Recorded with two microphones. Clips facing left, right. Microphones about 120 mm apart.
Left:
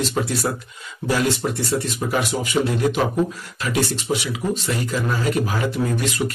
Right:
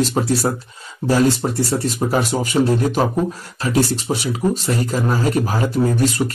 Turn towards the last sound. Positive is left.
turn(degrees=-35)  # may be behind; listen again after turning